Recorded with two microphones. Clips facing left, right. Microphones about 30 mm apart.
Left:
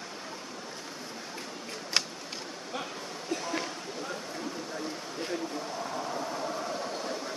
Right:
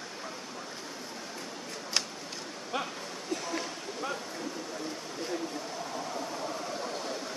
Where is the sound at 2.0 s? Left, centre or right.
Left.